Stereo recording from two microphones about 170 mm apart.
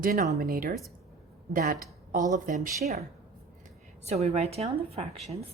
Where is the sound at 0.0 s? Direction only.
60° right (ahead or behind).